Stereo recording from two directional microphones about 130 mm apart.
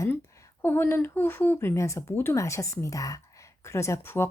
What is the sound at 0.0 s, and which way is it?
Speech, 20° left (ahead or behind).